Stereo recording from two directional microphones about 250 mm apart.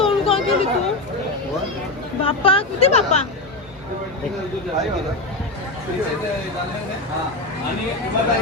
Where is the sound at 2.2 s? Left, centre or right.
Left.